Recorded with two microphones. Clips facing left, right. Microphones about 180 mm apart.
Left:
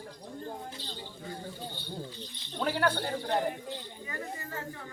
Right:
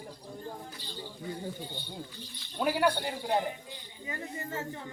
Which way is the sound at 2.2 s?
10° right (ahead or behind).